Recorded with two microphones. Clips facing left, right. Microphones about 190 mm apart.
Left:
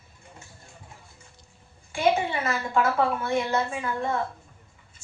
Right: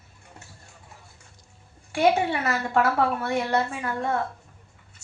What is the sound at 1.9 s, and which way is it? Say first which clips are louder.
A woman's voice: right 2 dB; 70° right (ahead or behind).